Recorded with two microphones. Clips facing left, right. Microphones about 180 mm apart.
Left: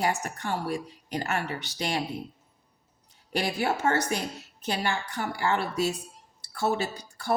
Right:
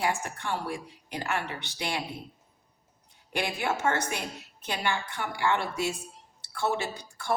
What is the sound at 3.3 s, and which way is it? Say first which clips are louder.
Speech: left 2 dB; 40° left (ahead or behind).